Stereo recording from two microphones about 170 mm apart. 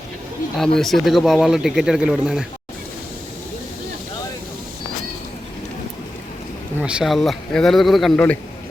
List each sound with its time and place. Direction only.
0.5 s speech: centre (ahead or behind)
6.7 s speech: 5° right (ahead or behind)